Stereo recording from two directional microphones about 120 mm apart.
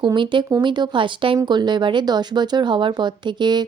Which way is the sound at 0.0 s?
40° right (ahead or behind).